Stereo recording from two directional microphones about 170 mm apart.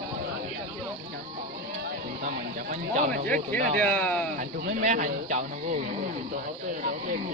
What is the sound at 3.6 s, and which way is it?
Speech, 50° right (ahead or behind).